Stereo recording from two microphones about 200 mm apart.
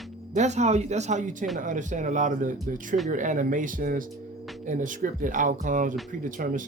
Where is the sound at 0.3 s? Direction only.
35° right (ahead or behind).